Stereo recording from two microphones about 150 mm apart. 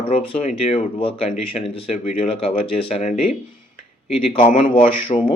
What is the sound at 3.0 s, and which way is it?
Speech, 50° left (ahead or behind).